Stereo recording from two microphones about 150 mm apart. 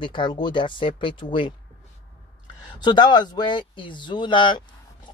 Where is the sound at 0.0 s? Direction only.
30° left (ahead or behind).